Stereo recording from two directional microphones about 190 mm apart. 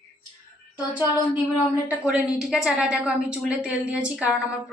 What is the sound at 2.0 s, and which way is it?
A woman's voice, 5° right (ahead or behind).